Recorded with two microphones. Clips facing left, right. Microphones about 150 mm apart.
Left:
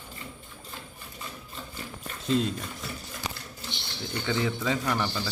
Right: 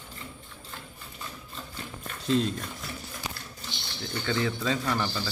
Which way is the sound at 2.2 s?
Centre (ahead or behind).